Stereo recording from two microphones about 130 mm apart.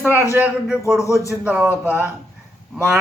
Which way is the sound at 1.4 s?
10° right (ahead or behind).